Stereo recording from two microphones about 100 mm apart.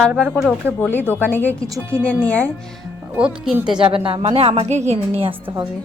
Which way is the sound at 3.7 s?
60° right (ahead or behind).